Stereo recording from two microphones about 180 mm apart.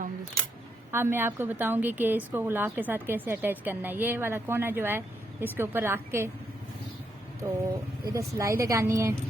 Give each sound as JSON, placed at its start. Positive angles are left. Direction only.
{"t": 0.9, "sound": "a woman's voice", "side_deg": -15}
{"t": 7.4, "sound": "a woman's voice", "side_deg": -10}